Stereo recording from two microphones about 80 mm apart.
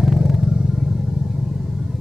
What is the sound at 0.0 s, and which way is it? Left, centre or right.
Vehicle, centre.